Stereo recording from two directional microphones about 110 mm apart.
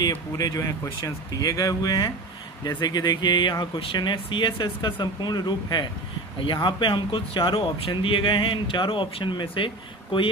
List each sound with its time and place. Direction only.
0.1 s speech: 30° left (ahead or behind)